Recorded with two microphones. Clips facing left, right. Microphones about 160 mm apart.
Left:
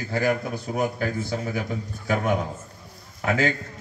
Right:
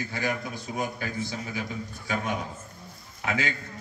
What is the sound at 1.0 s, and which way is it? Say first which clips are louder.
A man's voice: left 6 dB; 45° left (ahead or behind).